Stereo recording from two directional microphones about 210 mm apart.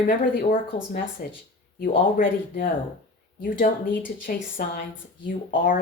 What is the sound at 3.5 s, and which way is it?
A woman's voice, 40° left (ahead or behind).